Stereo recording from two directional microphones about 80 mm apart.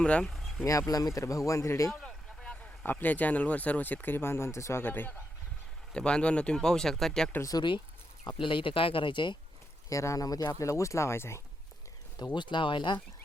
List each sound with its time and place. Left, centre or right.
0.0 s speech: centre
0.3 s a sound: centre
0.6 s speech: left
1.9 s speech: centre
2.8 s speech: left
4.8 s speech: left
5.9 s speech: centre
7.5 s speech: left
8.3 s speech: left
9.9 s speech: left
10.6 s speech: left
12.2 s speech: left